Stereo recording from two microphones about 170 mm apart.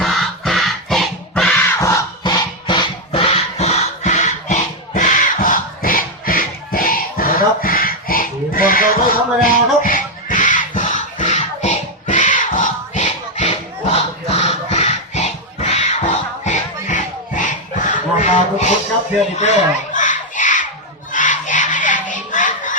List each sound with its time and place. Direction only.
0.0 s music: centre (ahead or behind)
1.8 s music: 20° left (ahead or behind); by 18.7 s 45° left (ahead or behind)
19.4 s a sound: 45° left (ahead or behind)